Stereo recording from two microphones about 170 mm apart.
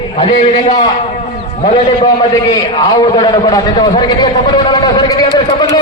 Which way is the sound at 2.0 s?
20° left (ahead or behind).